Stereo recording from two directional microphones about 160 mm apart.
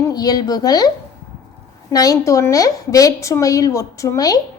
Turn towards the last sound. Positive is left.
turn(degrees=20)  # may be behind; listen again after turning